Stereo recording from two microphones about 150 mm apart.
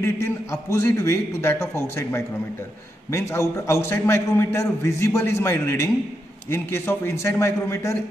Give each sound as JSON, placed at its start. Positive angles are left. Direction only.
{"t": 0.0, "sound": "a man's voice", "side_deg": 20}